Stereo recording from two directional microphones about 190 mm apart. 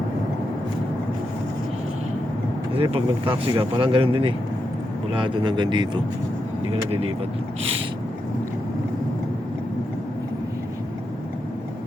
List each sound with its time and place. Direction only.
2.7 s speech: 25° right (ahead or behind)